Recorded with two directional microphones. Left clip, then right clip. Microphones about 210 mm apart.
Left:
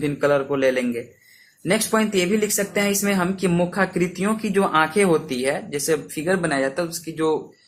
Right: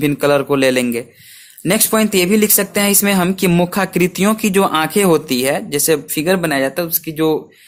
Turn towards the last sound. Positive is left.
turn(degrees=-40)  # may be behind; listen again after turning